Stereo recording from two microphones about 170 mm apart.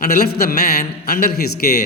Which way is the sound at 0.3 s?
60° left (ahead or behind).